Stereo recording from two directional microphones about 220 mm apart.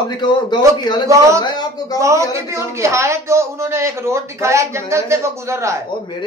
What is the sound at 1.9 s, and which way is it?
A man's voice, 15° right (ahead or behind).